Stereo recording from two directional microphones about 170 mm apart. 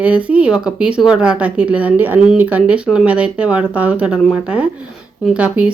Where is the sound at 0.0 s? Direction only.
10° right (ahead or behind).